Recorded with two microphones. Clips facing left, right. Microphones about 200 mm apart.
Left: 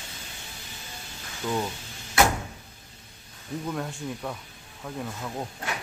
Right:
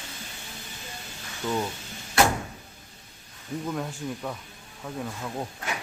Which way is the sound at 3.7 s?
Centre (ahead or behind).